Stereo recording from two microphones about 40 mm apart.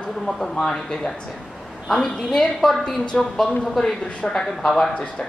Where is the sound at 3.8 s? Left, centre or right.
Centre.